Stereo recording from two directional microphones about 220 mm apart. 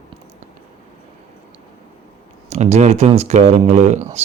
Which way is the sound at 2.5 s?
30° right (ahead or behind).